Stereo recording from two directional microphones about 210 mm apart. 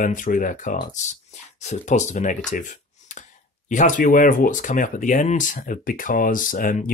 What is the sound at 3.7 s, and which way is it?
Speech, 35° left (ahead or behind).